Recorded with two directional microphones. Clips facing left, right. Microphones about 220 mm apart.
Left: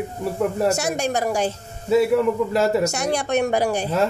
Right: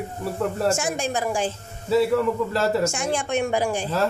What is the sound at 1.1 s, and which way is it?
Speech, 40° left (ahead or behind).